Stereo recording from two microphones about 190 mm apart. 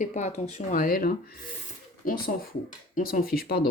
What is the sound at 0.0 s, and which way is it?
Speech, 40° left (ahead or behind).